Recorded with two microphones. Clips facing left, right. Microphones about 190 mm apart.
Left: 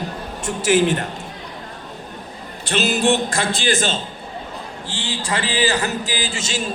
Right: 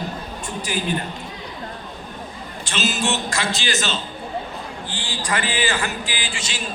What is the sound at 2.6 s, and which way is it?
A man's voice, 60° left (ahead or behind).